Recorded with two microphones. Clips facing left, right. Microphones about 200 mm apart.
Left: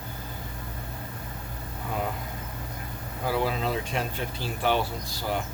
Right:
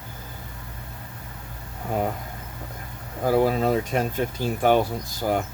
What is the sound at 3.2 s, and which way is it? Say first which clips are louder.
Speech: right 7 dB; 45° right (ahead or behind).